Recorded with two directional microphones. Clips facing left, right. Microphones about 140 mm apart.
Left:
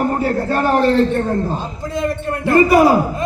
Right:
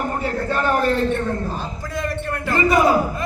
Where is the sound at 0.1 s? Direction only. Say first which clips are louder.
Left 5 dB; 35° left (ahead or behind).